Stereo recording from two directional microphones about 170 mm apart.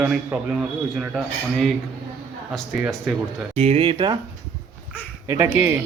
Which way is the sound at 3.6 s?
35° right (ahead or behind).